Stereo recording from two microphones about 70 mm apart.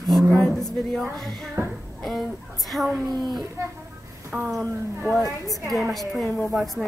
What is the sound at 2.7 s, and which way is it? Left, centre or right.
Speech, centre.